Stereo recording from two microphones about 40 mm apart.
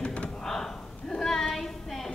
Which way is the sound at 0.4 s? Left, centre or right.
Centre.